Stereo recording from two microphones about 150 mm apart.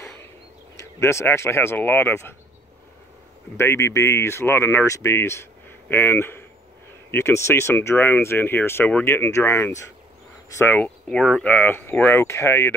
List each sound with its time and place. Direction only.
0.7 s speech: 20° left (ahead or behind)
3.5 s speech: 20° left (ahead or behind)